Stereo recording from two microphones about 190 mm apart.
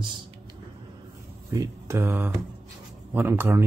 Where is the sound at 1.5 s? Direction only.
15° right (ahead or behind).